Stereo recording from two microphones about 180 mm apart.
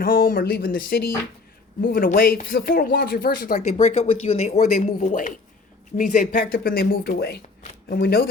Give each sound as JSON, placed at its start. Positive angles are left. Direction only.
{"t": 0.0, "sound": "speech", "side_deg": 55}